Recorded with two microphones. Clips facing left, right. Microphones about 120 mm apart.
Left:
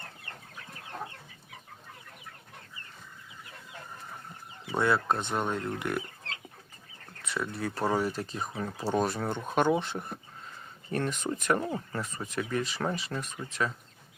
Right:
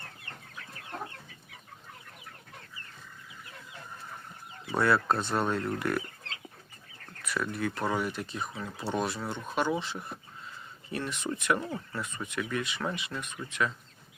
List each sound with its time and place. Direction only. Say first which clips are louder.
4.8 s speech: right 1 dB; 20° left (ahead or behind)
7.2 s speech: right 1 dB; 25° left (ahead or behind)